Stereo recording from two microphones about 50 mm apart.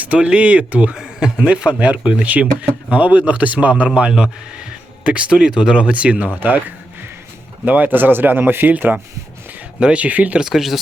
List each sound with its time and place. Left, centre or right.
0.0 s speech: right
0.9 s speech: centre; by 8.7 s right
9.8 s speech: right
10.4 s speech: centre